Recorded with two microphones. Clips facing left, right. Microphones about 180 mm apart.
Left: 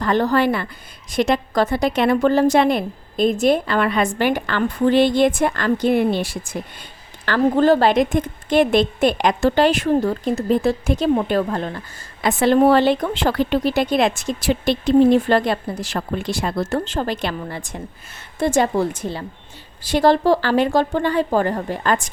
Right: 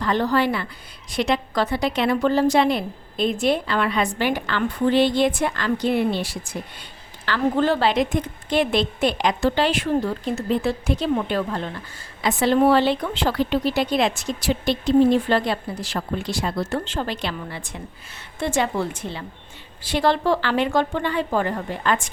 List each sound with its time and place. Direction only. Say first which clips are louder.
0.0 s a woman's voice: left 3 dB; 45° left (ahead or behind)